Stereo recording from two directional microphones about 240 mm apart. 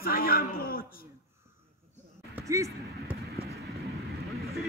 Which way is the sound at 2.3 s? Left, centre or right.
Centre.